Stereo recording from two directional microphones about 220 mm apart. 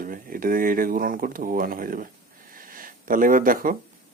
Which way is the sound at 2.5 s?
40° right (ahead or behind).